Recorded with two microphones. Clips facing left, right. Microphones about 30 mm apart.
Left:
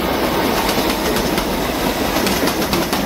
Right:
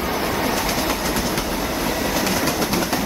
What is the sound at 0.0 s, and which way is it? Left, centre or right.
Train, left.